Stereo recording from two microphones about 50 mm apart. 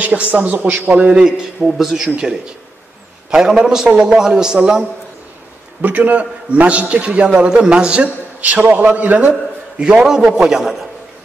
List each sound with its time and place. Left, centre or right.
0.0 s a man's voice: right
1.2 s a man's voice: centre
3.4 s a man's voice: centre
5.8 s a man's voice: right
7.3 s a man's voice: centre; by 9.3 s right
9.3 s a sound: centre
10.0 s a man's voice: centre